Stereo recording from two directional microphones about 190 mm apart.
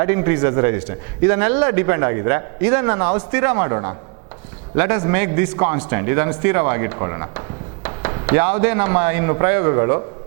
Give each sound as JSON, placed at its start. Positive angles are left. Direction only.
{"t": 0.0, "sound": "a man's voice", "side_deg": -15}